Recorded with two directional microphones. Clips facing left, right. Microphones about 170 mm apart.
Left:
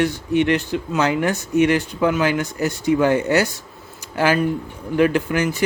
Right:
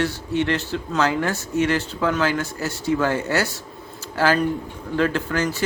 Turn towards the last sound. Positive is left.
turn(degrees=15)  # may be behind; listen again after turning